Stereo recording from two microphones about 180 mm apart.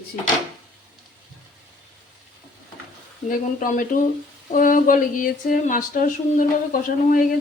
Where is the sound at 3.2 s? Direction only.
50° left (ahead or behind).